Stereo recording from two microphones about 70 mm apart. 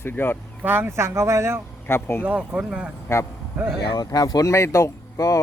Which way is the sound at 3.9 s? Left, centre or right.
Left.